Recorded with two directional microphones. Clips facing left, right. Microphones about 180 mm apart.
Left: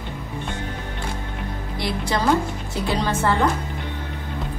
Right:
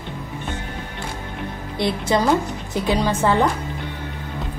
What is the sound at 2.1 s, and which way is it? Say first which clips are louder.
A woman's voice: right 1 dB; 20° right (ahead or behind).